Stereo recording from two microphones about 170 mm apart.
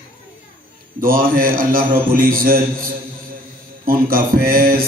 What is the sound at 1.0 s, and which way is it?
Mantra, 60° right (ahead or behind).